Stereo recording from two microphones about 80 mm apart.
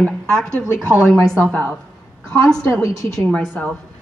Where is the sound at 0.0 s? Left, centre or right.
Centre.